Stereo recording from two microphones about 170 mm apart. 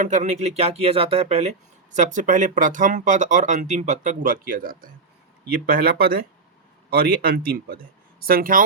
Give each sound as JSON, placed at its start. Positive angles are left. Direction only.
{"t": 0.0, "sound": "speech", "side_deg": -45}